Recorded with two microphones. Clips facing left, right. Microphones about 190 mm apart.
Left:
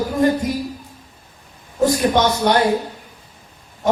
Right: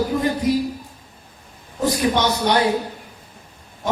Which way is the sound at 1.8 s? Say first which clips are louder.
Left 3 dB; 50° left (ahead or behind).